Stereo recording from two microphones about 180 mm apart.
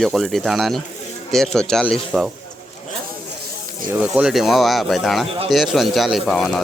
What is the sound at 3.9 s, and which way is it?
Speech, 5° right (ahead or behind).